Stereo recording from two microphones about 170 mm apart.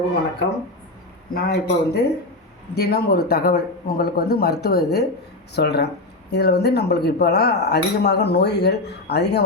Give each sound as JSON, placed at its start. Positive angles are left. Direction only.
{"t": 1.3, "sound": "speech", "side_deg": 65}